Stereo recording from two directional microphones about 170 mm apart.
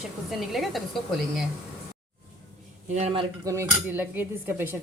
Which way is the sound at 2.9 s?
35° right (ahead or behind).